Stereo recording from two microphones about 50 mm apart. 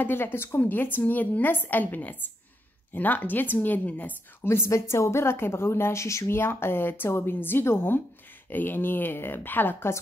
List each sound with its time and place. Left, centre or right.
0.0 s speech: left
0.6 s a woman's voice: left
4.5 s a woman's voice: left
6.3 s speech: left